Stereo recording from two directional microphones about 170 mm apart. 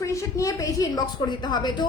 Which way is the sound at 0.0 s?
20° left (ahead or behind).